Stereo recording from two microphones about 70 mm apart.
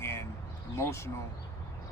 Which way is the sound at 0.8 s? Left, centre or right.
Left.